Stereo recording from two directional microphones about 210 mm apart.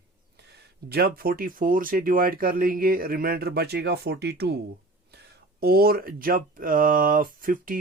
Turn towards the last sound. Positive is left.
turn(degrees=-40)  # may be behind; listen again after turning